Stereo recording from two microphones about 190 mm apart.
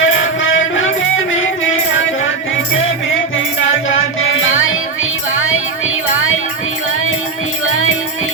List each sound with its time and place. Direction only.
0.0 s music: 90° left
7.6 s music: 90° left